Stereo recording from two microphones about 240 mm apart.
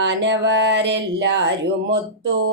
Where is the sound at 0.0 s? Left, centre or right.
Right.